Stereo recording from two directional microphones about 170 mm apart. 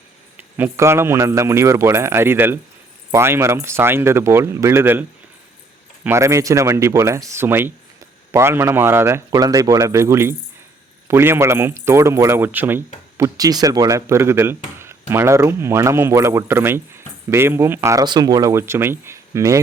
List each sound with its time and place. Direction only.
0.3 s speech: 10° right (ahead or behind)
6.1 s speech: 15° right (ahead or behind)